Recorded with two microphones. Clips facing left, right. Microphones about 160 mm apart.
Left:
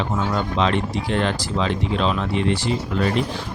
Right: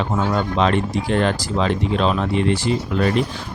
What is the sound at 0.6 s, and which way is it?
Speech, 45° right (ahead or behind).